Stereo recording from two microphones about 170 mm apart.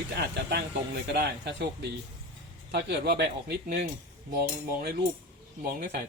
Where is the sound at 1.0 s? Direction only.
85° right.